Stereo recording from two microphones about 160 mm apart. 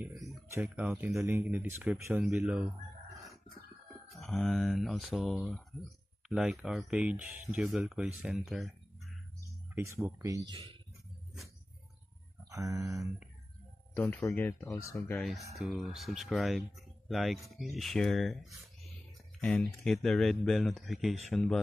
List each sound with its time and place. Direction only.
0.5 s speech: 10° right (ahead or behind)
4.2 s speech: centre (ahead or behind)
10.0 s speech: 20° right (ahead or behind)
12.4 s speech: 20° right (ahead or behind)
13.9 s speech: 15° left (ahead or behind)
15.1 s speech: centre (ahead or behind)